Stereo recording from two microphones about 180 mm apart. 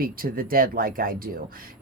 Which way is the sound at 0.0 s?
55° right (ahead or behind).